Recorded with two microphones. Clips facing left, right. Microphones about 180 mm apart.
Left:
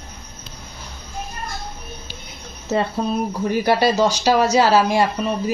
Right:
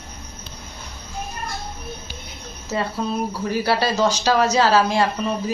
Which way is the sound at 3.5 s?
15° left (ahead or behind).